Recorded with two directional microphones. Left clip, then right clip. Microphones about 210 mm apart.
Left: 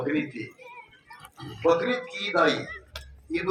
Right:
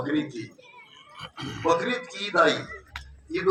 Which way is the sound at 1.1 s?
35° right (ahead or behind).